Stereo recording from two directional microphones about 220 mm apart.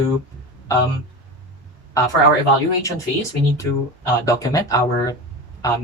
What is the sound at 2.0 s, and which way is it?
Speech, 15° left (ahead or behind).